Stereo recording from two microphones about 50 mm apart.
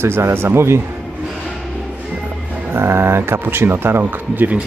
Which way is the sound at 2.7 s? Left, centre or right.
Right.